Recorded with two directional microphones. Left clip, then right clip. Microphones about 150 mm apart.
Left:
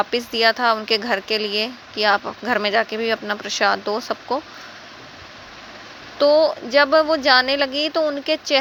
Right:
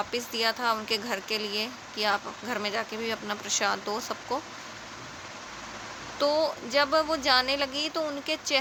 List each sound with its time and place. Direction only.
0.0 s speech: 40° left (ahead or behind)
6.1 s speech: 35° left (ahead or behind)